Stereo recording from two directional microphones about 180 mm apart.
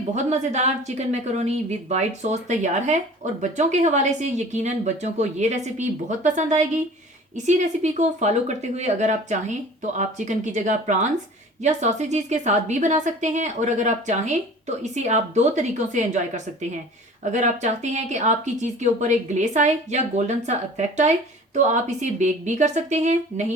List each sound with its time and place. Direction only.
0.1 s speech: 40° right (ahead or behind)